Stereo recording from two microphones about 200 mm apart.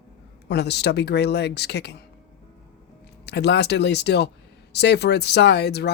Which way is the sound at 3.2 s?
55° left (ahead or behind).